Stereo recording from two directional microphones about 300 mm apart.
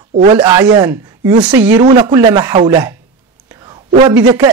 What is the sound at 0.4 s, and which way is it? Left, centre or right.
Speech, centre.